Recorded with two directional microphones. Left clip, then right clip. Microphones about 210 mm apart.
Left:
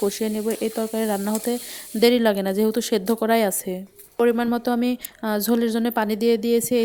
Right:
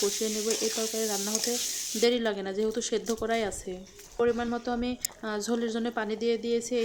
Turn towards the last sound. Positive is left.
turn(degrees=40)  # may be behind; listen again after turning